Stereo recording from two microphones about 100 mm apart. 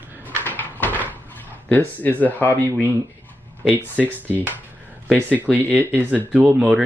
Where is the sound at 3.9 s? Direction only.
15° right (ahead or behind).